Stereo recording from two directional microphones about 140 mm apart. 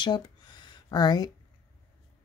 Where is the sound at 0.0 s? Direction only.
35° left (ahead or behind).